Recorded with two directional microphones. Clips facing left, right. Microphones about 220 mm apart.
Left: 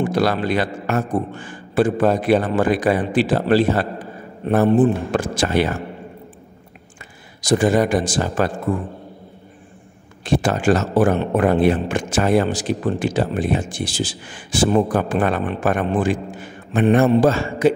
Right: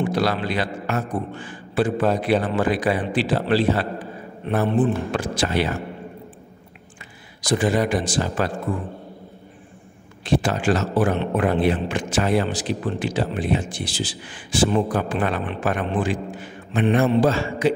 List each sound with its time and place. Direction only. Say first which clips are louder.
0.0 s a man's voice: left 3 dB; 45° left (ahead or behind)
7.4 s a man's voice: left 4 dB; 45° left (ahead or behind)
10.2 s a man's voice: left 3 dB; 45° left (ahead or behind)